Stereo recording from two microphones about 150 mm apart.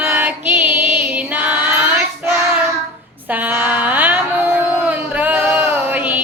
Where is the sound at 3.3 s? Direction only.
10° right (ahead or behind).